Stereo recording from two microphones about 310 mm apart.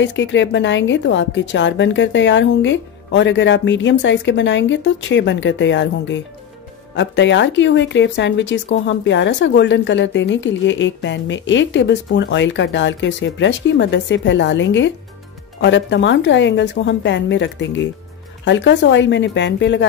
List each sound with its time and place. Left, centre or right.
0.0 s speech: left